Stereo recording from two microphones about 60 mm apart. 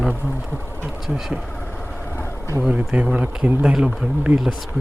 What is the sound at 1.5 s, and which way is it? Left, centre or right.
Vehicle, left.